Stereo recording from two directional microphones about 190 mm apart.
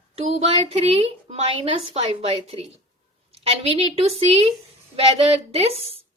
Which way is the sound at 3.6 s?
30° right (ahead or behind).